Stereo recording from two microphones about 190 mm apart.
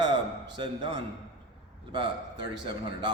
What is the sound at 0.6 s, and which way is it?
A man's voice, 25° right (ahead or behind).